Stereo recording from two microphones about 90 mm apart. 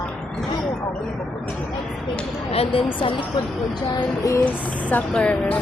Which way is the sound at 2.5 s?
90° left.